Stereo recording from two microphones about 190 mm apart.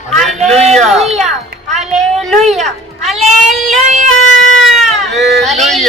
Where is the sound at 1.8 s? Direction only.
Centre (ahead or behind).